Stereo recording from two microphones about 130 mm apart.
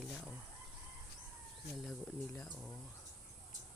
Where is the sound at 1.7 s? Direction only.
Centre (ahead or behind).